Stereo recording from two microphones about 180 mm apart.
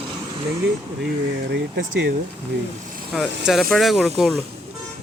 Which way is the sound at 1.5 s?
80° right.